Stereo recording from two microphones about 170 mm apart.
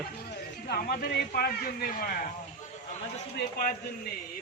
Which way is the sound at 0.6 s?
65° left (ahead or behind).